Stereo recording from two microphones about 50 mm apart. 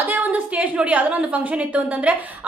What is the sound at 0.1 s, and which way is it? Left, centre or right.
A woman's voice, right.